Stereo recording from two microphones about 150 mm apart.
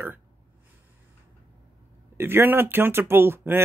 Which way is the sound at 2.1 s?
15° right (ahead or behind).